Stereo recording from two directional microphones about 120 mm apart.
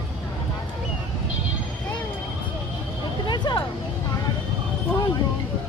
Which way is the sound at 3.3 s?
40° left (ahead or behind).